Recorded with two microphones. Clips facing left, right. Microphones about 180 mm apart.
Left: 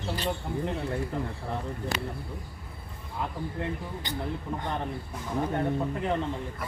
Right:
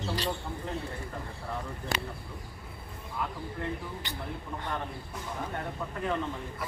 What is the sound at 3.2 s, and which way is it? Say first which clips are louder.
Speech: left 1 dB; 25° left (ahead or behind).